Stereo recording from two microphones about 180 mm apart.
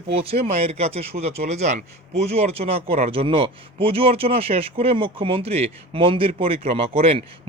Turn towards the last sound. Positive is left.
turn(degrees=-35)  # may be behind; listen again after turning